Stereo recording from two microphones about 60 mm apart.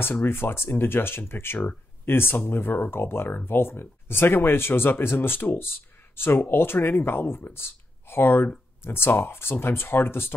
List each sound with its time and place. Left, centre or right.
0.0 s speech: left